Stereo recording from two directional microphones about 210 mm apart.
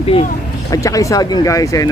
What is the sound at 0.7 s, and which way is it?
Speech, 15° left (ahead or behind).